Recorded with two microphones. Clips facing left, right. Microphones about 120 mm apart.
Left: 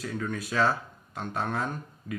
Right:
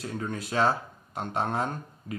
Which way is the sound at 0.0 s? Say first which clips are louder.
Left 1 dB; 30° right (ahead or behind).